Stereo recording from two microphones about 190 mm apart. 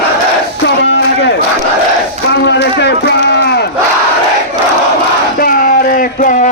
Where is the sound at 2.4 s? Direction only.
65° left (ahead or behind).